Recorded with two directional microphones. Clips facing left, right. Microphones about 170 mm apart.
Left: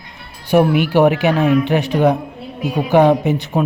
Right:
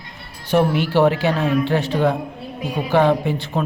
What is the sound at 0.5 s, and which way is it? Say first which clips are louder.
Speech: left 4 dB; 15° left (ahead or behind).